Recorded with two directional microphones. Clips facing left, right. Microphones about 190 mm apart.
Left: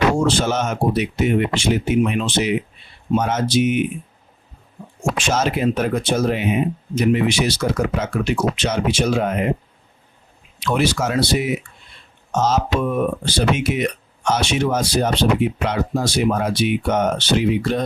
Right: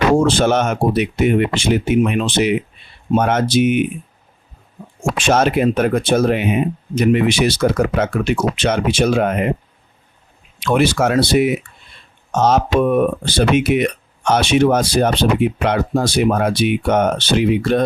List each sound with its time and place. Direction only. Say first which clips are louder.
0.2 s speech: right 4 dB; 60° right (ahead or behind)
5.3 s speech: right 6 dB; 60° right (ahead or behind)
10.6 s speech: right 4 dB; 55° right (ahead or behind)